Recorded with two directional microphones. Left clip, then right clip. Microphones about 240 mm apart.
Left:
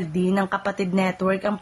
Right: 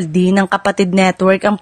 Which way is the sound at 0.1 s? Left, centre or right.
Right.